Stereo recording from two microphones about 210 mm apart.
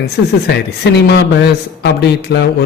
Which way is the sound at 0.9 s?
50° left (ahead or behind).